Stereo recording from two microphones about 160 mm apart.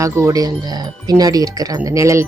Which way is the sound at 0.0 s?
20° right (ahead or behind).